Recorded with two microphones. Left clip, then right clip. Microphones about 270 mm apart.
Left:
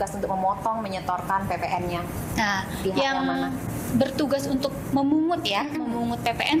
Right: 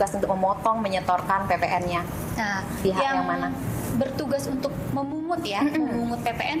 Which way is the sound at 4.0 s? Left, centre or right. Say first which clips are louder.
Left 2 dB; left.